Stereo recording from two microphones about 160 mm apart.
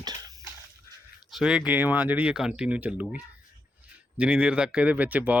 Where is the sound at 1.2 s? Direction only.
5° right (ahead or behind).